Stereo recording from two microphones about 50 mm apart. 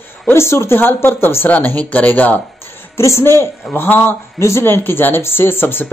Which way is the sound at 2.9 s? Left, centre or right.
Left.